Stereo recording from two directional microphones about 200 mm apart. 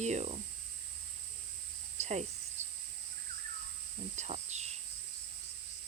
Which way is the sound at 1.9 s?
35° right (ahead or behind).